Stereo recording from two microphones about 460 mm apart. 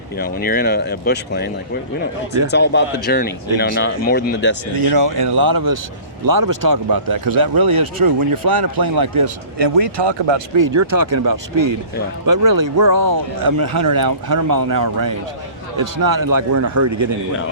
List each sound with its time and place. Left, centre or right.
0.2 s speech: centre
4.7 s speech: right
10.6 s a man's voice: right